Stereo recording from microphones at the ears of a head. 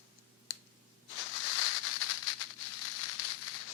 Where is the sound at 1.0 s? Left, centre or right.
Left.